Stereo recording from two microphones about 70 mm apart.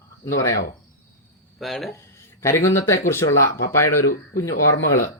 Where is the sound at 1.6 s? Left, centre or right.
Centre.